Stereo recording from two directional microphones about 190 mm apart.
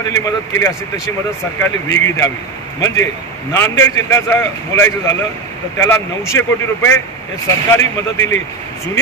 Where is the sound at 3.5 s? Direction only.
15° left (ahead or behind).